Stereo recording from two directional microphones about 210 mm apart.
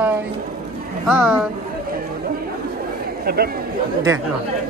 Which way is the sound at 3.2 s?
45° right (ahead or behind).